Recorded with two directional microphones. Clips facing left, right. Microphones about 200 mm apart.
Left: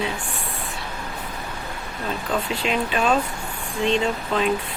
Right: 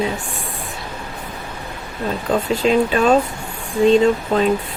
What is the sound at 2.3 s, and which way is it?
Speech, 40° right (ahead or behind).